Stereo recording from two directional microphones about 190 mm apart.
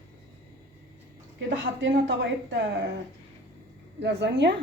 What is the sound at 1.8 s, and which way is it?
Speech, 70° right (ahead or behind).